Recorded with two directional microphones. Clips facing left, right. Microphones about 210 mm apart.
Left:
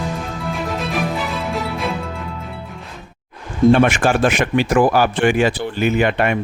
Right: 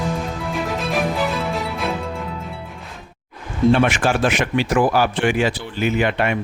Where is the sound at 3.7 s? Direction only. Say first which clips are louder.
Left 3 dB; 50° left (ahead or behind).